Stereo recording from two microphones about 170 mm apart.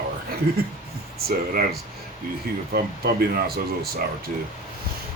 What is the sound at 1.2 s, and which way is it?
A man's voice, 65° right (ahead or behind).